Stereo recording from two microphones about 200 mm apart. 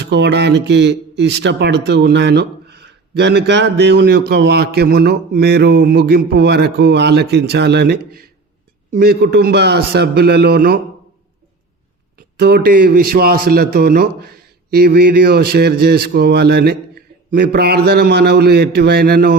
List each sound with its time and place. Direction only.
0.0 s a man's voice: 60° right (ahead or behind)
12.4 s a man's voice: 50° right (ahead or behind)